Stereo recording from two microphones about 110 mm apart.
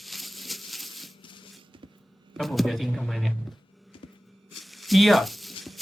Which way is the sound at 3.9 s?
50° left (ahead or behind).